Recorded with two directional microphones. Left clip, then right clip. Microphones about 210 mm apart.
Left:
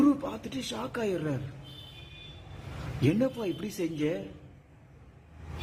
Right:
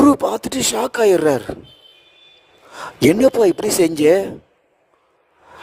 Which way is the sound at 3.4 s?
55° right (ahead or behind).